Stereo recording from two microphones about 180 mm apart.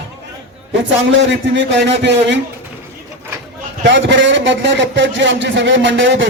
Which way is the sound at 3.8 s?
90° right.